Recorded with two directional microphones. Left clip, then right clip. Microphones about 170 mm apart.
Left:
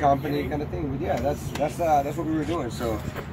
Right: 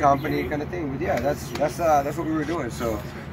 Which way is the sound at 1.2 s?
10° left (ahead or behind).